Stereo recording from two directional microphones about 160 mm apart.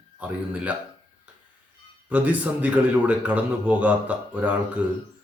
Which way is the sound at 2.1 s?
10° right (ahead or behind).